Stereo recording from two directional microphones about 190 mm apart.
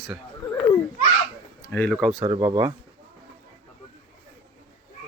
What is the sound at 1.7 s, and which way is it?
Speech, 10° left (ahead or behind).